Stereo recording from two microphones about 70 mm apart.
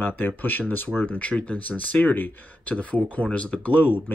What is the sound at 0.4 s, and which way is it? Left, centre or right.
Speech, left.